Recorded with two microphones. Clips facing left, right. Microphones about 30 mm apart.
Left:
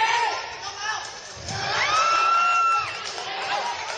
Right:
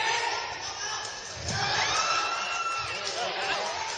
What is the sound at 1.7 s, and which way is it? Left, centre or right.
Music, left.